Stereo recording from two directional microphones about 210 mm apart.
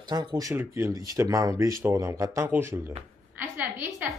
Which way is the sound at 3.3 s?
10° right (ahead or behind).